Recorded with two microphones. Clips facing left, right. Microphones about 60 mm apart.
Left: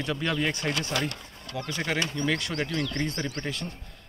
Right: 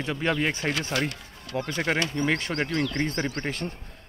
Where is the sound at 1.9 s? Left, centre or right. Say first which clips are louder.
Right 2 dB; right.